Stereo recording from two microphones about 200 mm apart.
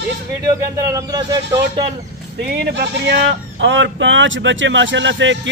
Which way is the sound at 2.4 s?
55° right (ahead or behind).